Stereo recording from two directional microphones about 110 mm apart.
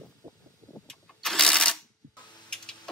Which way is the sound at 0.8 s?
5° left (ahead or behind).